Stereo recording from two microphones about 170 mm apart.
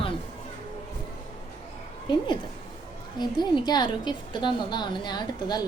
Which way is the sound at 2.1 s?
25° left (ahead or behind).